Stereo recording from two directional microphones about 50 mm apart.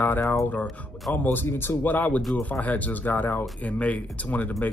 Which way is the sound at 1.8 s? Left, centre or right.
Left.